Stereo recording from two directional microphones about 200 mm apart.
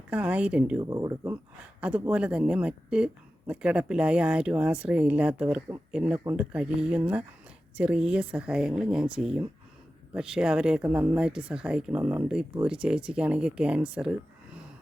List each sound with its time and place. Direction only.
0.1 s speech: 5° right (ahead or behind)
0.8 s speech: 15° right (ahead or behind)
1.8 s speech: 5° right (ahead or behind)